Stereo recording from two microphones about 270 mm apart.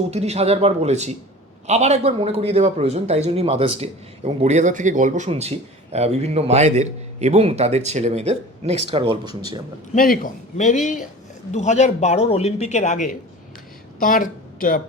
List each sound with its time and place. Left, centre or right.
0.1 s a man's voice: right
9.9 s speech: left